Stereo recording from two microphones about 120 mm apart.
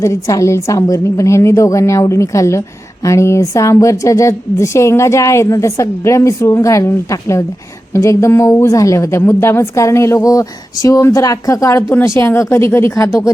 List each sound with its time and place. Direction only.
0.0 s a woman's voice: 25° left (ahead or behind)